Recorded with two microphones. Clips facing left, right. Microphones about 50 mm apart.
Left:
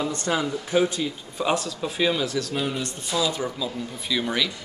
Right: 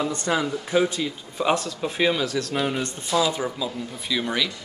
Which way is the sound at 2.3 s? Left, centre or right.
Right.